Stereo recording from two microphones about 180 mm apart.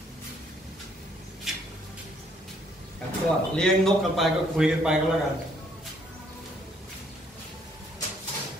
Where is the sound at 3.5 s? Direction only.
5° left (ahead or behind).